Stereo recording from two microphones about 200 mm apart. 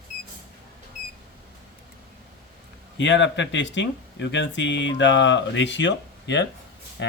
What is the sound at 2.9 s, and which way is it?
Speech, 65° left (ahead or behind).